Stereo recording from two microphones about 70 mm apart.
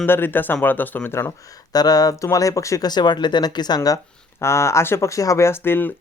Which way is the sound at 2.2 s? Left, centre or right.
Left.